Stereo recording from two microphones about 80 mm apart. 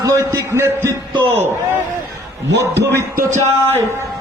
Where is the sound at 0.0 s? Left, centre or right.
Right.